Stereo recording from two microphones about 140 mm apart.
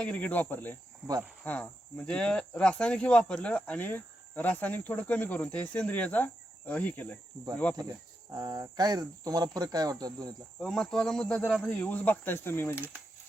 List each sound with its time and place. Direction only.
0.0 s speech: 10° left (ahead or behind)
8.3 s speech: 25° right (ahead or behind)
10.6 s speech: 5° left (ahead or behind)
12.7 s speech: 10° right (ahead or behind)